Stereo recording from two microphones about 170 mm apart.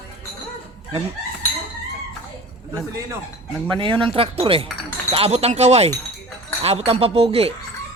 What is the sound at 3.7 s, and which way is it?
Speech, 30° right (ahead or behind).